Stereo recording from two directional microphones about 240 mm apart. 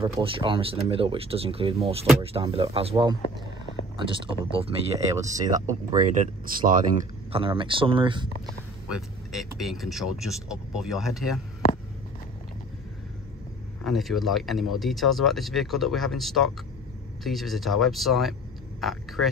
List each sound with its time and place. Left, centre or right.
0.0 s speech: right
6.2 s speech: right
7.3 s speech: right
8.9 s speech: centre
13.8 s speech: centre